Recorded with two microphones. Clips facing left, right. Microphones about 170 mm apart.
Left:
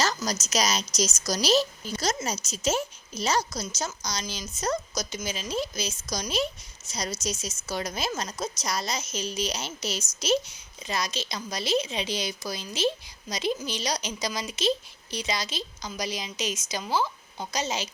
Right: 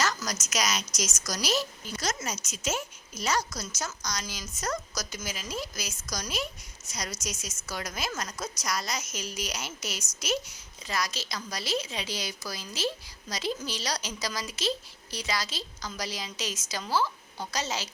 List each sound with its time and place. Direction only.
0.0 s a woman's voice: 30° left (ahead or behind)